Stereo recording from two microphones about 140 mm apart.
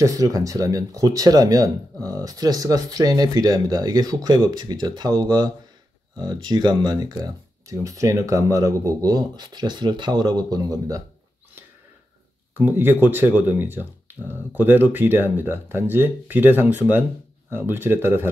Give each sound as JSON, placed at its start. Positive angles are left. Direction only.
{"t": 0.0, "sound": "speech", "side_deg": -25}
{"t": 12.5, "sound": "speech", "side_deg": -15}